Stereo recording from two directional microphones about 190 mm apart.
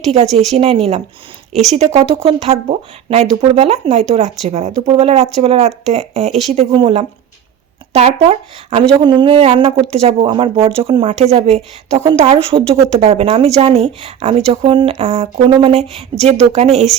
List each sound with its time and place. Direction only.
0.3 s speech: 35° right (ahead or behind)